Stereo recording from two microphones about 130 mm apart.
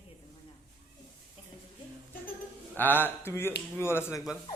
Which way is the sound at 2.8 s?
15° left (ahead or behind).